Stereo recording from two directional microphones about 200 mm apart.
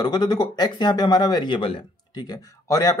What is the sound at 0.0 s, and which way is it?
Speech, 20° left (ahead or behind).